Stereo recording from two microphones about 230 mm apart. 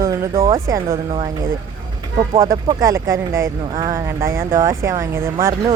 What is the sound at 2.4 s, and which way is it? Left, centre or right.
Speech, centre.